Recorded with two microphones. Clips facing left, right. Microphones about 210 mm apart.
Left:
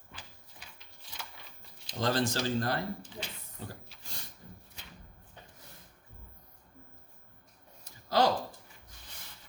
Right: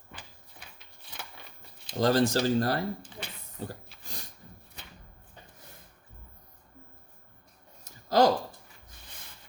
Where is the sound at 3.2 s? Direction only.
55° right (ahead or behind).